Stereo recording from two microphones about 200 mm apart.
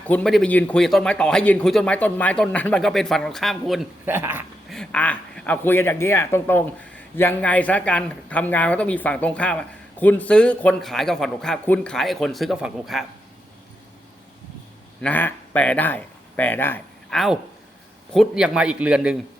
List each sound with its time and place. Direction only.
0.1 s speech: 5° left (ahead or behind)
4.0 s speech: 10° right (ahead or behind)
4.7 s speech: 5° left (ahead or behind)
15.0 s speech: 10° left (ahead or behind)